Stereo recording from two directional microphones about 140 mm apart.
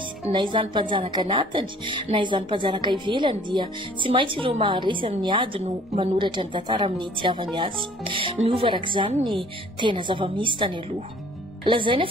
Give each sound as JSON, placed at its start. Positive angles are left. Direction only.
{"t": 0.3, "sound": "speech", "side_deg": -35}